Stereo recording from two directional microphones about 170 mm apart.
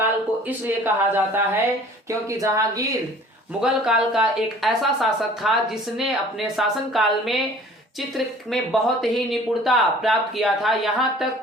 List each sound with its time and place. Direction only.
0.0 s speech: 10° right (ahead or behind)
3.6 s speech: 5° right (ahead or behind)